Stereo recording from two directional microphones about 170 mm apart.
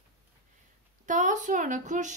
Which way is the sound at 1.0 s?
45° right (ahead or behind).